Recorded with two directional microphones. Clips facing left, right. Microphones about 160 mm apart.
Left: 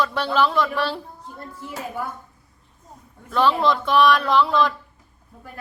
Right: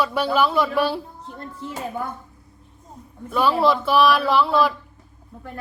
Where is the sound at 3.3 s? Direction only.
10° right (ahead or behind).